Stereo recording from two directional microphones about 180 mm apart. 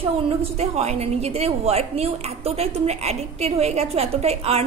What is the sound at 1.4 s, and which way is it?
A woman's voice, 35° right (ahead or behind).